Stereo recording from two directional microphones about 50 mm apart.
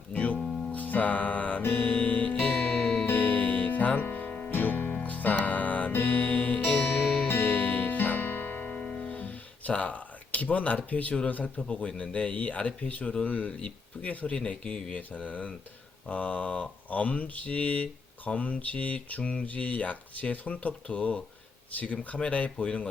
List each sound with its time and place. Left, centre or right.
0.1 s music: left; by 3.1 s centre
3.1 s music: left
4.5 s music: left
11.5 s speech: left
14.3 s speech: centre